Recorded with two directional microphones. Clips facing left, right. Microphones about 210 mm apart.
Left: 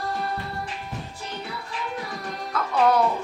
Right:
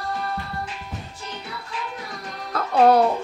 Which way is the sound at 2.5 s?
35° right (ahead or behind).